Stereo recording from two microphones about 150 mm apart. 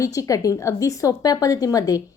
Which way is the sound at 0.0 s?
20° left (ahead or behind).